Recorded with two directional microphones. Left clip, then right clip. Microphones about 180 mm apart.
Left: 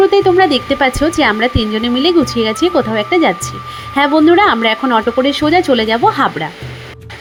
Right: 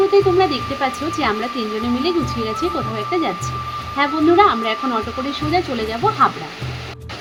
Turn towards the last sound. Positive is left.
turn(degrees=40)  # may be behind; listen again after turning